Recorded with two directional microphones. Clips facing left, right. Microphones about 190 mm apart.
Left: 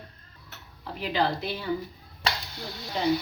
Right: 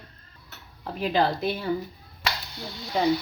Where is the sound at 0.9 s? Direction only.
45° right (ahead or behind).